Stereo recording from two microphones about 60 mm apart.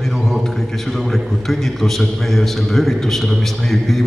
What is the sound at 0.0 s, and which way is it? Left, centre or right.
A man's voice, centre.